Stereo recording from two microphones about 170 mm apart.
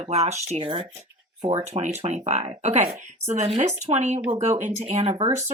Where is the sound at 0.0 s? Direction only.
40° right (ahead or behind).